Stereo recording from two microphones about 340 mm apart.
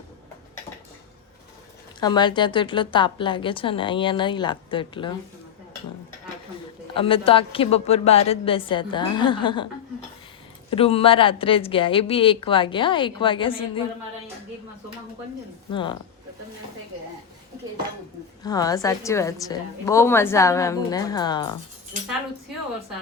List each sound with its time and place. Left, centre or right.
2.0 s a woman's voice: centre
6.9 s a woman's voice: centre
10.7 s a woman's voice: centre
15.7 s a woman's voice: centre
18.4 s a woman's voice: centre